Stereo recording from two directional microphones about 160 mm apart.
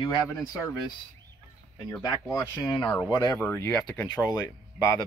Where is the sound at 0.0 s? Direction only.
25° left (ahead or behind).